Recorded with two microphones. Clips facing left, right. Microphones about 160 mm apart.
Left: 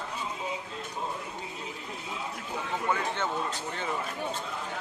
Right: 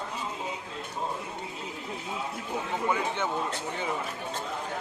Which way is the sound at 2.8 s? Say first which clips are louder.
Right 1 dB; 10° right (ahead or behind).